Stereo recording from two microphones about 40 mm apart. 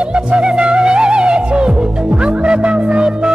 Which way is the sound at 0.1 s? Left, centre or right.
Right.